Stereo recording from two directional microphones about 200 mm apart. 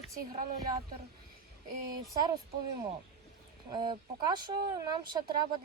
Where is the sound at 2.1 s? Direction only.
20° right (ahead or behind).